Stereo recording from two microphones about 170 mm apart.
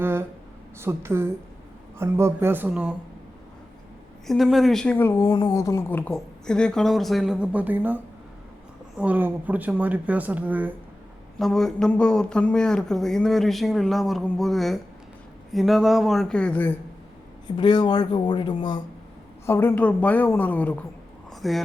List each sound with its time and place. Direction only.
0.0 s a sound: 15° right (ahead or behind)
0.8 s speech: 15° right (ahead or behind)
4.3 s speech: centre (ahead or behind)
5.1 s speech: 25° left (ahead or behind); by 10.7 s 10° right (ahead or behind)
11.3 s speech: centre (ahead or behind)
17.6 s speech: 25° left (ahead or behind)
19.5 s a woman's voice: 10° left (ahead or behind)
21.2 s a sound: centre (ahead or behind)